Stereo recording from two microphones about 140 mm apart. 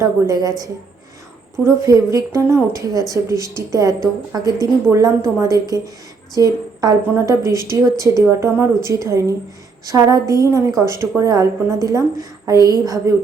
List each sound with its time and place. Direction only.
0.0 s a woman's voice: 25° right (ahead or behind)
1.6 s a woman's voice: 25° right (ahead or behind)